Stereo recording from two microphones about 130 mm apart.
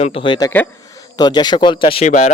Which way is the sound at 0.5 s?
15° left (ahead or behind).